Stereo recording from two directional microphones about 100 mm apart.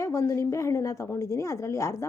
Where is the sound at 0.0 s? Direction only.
30° left (ahead or behind).